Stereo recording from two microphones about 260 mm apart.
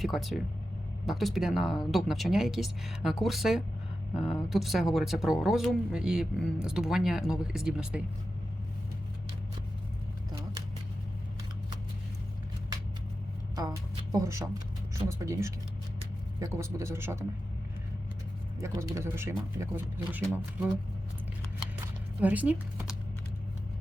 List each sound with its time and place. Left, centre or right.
0.0 s speech: centre
13.6 s a man's voice: centre
18.6 s a man's voice: centre
22.2 s speech: centre